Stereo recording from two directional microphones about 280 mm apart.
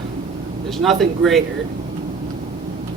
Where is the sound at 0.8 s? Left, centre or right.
Centre.